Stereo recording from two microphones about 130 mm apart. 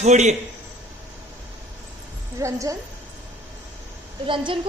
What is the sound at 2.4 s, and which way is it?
Speech, 25° right (ahead or behind).